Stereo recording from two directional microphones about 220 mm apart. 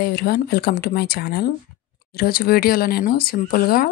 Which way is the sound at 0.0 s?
45° left (ahead or behind).